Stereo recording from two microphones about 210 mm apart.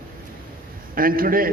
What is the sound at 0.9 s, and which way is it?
Speech, 45° right (ahead or behind).